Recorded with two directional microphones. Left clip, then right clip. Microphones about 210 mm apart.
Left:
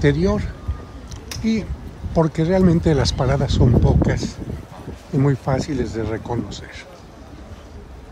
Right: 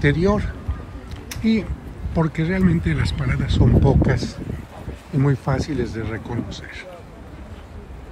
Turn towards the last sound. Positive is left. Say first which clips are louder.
# left 1 dB
turn(degrees=10)  # may be behind; listen again after turning